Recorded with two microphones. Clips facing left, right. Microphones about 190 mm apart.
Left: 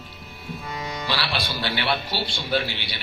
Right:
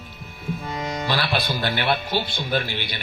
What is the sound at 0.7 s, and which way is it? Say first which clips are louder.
Music: right 2 dB; 30° right (ahead or behind).